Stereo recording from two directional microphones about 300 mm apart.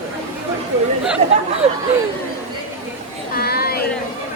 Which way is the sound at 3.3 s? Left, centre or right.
Left.